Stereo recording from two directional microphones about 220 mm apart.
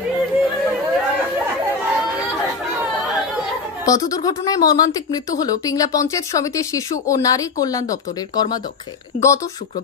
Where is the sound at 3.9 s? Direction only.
15° left (ahead or behind).